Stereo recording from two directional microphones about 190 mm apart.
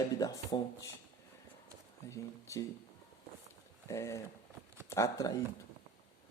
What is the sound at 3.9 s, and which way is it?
Speech, 15° left (ahead or behind).